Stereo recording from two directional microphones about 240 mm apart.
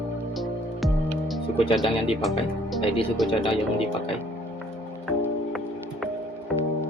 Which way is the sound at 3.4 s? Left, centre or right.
Left.